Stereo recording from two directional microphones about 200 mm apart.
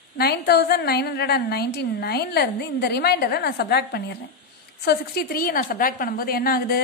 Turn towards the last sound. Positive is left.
turn(degrees=50)  # may be behind; listen again after turning